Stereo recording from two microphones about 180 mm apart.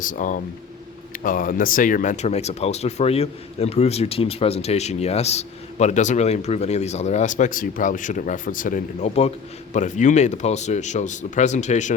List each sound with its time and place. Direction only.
0.0 s speech: 45° left (ahead or behind)